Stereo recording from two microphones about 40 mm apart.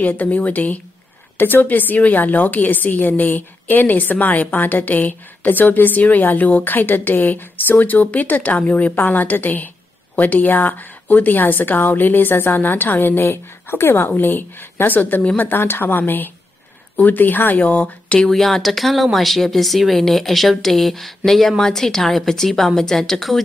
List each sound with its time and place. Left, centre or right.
0.0 s a woman's voice: left
6.6 s a woman's voice: left
18.3 s a woman's voice: centre